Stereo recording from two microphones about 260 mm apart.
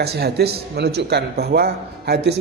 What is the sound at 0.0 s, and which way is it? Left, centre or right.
Speech, right.